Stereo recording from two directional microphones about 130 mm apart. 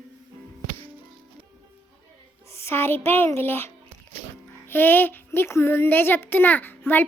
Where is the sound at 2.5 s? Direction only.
20° left (ahead or behind).